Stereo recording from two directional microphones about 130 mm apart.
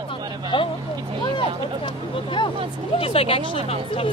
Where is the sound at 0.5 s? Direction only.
40° left (ahead or behind).